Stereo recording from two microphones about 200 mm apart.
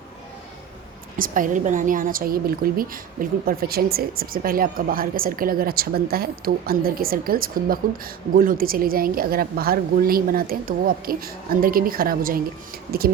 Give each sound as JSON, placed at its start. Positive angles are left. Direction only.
{"t": 1.1, "sound": "a woman's voice", "side_deg": -45}